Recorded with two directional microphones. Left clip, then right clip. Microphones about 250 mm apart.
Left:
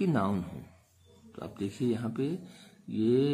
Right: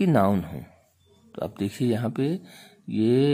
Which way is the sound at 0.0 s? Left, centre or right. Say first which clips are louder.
Right 9 dB; right.